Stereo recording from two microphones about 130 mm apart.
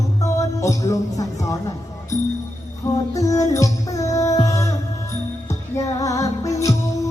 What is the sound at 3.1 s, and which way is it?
Music, 25° left (ahead or behind).